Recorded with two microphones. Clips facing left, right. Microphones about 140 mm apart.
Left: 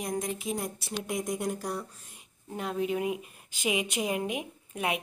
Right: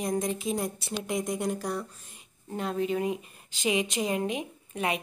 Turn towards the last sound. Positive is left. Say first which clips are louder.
# right 1 dB
turn(degrees=5)  # may be behind; listen again after turning